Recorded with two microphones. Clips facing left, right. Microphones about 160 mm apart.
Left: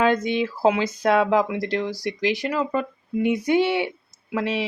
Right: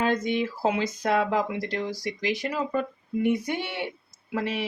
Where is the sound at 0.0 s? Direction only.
90° left.